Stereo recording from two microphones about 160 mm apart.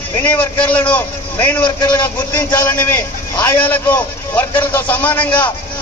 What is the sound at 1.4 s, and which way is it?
A man's voice, 10° left (ahead or behind).